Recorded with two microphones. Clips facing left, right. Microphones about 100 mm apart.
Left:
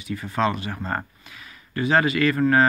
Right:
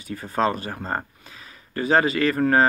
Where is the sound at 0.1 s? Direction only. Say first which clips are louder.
Right 1 dB; 40° right (ahead or behind).